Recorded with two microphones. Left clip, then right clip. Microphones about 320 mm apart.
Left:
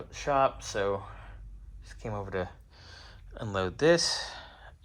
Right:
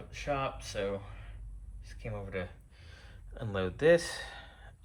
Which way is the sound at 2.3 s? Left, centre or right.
Centre.